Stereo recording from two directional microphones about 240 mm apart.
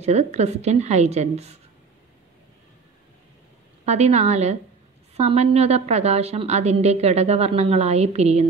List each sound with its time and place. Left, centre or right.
0.0 s a woman's voice: right
3.8 s a woman's voice: right